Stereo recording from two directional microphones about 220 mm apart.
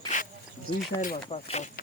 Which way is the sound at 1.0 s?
30° left (ahead or behind).